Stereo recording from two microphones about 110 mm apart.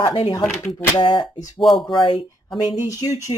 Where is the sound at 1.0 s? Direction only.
45° left (ahead or behind).